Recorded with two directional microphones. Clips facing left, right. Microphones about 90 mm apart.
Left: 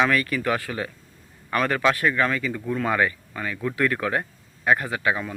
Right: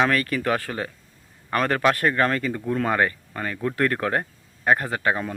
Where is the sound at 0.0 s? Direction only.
40° right (ahead or behind).